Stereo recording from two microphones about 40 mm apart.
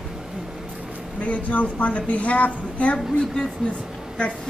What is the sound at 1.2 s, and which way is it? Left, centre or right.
A woman's voice, left.